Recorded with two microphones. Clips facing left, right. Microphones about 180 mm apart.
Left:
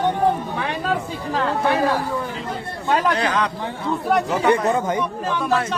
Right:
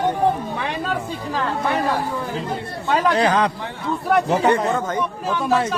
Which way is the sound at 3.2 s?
35° right (ahead or behind).